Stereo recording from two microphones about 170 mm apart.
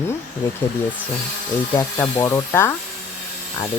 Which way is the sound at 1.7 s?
15° left (ahead or behind).